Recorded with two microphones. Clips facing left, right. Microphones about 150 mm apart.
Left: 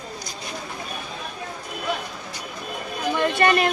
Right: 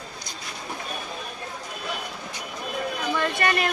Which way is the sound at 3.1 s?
20° left (ahead or behind).